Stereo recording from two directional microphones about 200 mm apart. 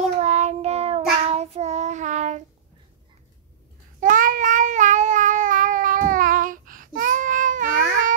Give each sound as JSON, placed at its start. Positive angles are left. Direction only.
{"t": 0.2, "sound": "child singing", "side_deg": -35}
{"t": 4.0, "sound": "cat", "side_deg": -40}